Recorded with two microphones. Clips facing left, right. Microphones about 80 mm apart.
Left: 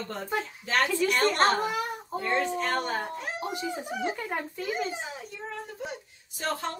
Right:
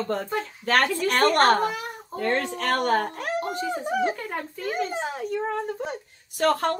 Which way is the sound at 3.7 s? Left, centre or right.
Right.